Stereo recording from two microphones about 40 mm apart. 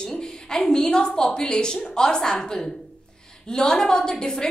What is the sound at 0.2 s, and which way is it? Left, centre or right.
A woman's voice, centre.